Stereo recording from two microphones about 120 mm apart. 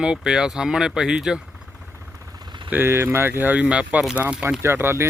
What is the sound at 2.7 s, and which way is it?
Speech, 20° right (ahead or behind).